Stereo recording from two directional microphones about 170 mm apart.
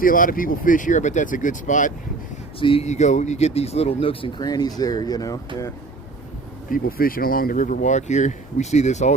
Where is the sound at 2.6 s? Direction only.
35° left (ahead or behind); by 5.7 s 20° left (ahead or behind).